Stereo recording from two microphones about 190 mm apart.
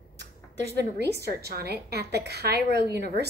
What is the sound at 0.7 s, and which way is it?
A woman's voice, 60° right (ahead or behind).